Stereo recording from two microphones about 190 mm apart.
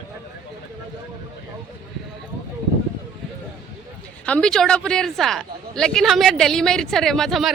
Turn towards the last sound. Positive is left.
turn(degrees=0)  # may be behind; listen again after turning